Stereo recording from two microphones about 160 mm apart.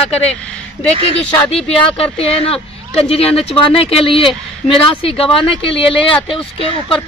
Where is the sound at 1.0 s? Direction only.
35° left (ahead or behind).